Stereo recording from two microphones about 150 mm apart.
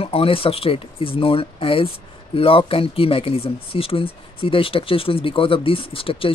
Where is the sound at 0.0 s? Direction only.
40° left (ahead or behind).